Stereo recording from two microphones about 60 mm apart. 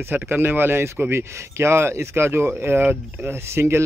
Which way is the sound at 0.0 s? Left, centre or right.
Right.